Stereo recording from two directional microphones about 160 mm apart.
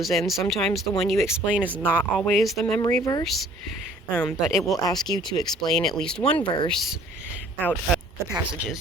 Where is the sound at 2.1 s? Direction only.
Centre (ahead or behind).